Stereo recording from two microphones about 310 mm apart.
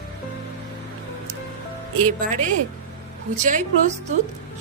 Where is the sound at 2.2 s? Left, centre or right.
Right.